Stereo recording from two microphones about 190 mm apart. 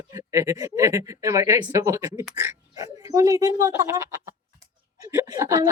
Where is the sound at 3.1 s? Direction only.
15° right (ahead or behind).